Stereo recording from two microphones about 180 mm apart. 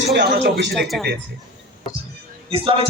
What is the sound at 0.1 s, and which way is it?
Speech, 65° right (ahead or behind).